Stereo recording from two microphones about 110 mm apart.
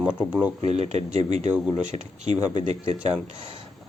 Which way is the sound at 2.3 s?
40° left (ahead or behind).